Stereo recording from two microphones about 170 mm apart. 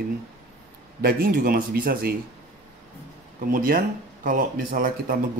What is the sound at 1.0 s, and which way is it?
Speech, 60° right (ahead or behind).